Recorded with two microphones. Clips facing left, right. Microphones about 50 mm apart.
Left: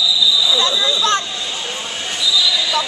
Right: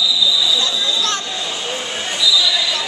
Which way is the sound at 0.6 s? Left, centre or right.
Left.